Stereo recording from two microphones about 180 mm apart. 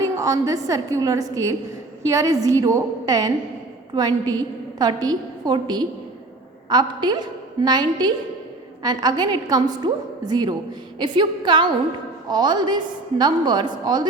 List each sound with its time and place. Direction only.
0.0 s a woman's voice: 20° right (ahead or behind)